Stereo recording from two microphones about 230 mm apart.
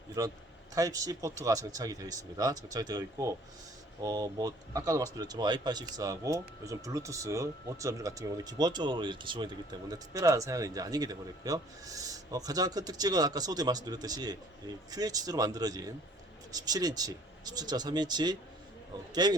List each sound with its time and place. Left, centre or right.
0.2 s speech: centre